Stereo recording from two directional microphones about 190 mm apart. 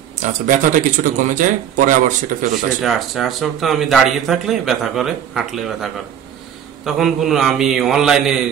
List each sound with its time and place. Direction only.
0.2 s speech: 40° right (ahead or behind)
2.8 s speech: centre (ahead or behind)